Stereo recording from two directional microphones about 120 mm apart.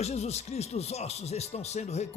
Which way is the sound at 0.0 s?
65° left (ahead or behind).